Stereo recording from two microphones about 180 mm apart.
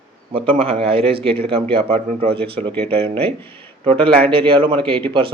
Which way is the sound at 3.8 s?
35° right (ahead or behind).